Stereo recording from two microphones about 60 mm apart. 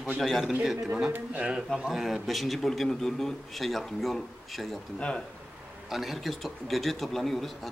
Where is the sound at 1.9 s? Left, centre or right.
Centre.